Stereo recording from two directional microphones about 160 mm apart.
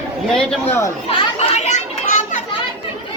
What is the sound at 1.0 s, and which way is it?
Children playing, 35° left (ahead or behind).